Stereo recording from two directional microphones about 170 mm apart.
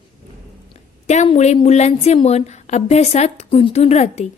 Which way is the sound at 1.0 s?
40° left (ahead or behind).